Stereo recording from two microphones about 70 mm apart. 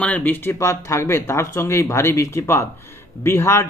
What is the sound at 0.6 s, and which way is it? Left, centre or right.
A man's voice, left.